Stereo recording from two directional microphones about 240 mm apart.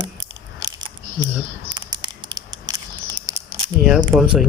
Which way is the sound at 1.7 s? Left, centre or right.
Centre.